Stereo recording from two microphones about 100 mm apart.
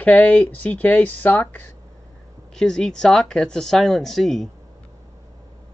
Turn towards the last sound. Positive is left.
turn(degrees=0)  # may be behind; listen again after turning